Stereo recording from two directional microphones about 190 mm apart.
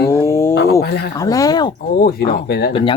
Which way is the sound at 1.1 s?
20° left (ahead or behind).